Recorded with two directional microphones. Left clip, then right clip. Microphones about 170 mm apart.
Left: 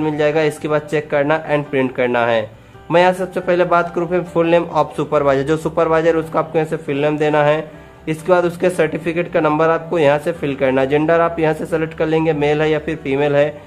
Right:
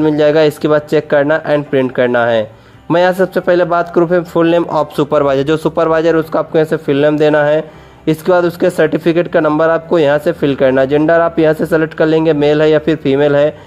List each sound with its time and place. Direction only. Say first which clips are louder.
0.0 s a man's voice: right 6 dB; 40° right (ahead or behind)